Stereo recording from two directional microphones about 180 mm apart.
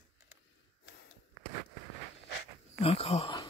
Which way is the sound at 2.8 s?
35° left (ahead or behind).